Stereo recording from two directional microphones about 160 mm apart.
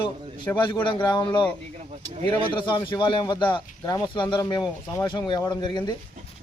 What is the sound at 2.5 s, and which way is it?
Speech, 30° left (ahead or behind).